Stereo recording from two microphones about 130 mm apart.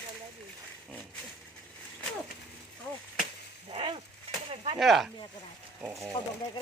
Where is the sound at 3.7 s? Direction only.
45° right (ahead or behind).